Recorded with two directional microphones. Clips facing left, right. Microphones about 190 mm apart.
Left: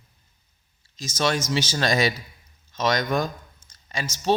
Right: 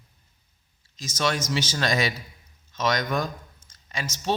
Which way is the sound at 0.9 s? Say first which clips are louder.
Left 2 dB; 30° left (ahead or behind).